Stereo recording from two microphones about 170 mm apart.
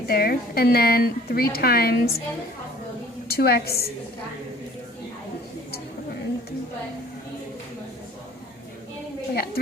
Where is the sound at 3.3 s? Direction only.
65° left (ahead or behind).